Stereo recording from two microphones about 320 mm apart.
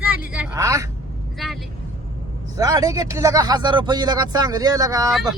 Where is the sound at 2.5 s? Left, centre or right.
Centre.